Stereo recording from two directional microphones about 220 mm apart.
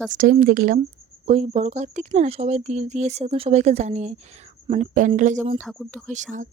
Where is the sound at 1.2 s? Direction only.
30° right (ahead or behind).